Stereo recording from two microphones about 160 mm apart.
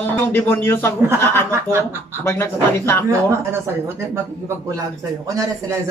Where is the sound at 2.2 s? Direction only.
15° left (ahead or behind).